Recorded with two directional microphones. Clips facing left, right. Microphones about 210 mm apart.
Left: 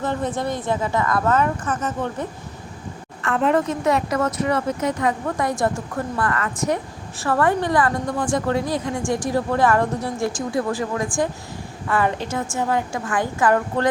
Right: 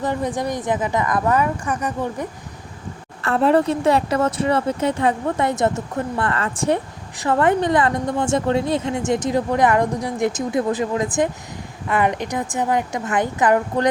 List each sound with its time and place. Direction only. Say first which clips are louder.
0.0 s speech: right 1 dB; 15° right (ahead or behind)
3.2 s a woman's voice: right 3 dB; 35° right (ahead or behind); by 13.8 s 15° right (ahead or behind)